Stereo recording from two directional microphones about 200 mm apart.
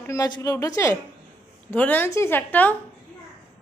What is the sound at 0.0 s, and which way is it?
A woman's voice, 15° left (ahead or behind).